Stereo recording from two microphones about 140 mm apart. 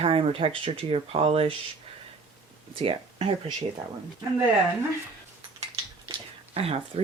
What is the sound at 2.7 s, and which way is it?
Speech, 40° right (ahead or behind).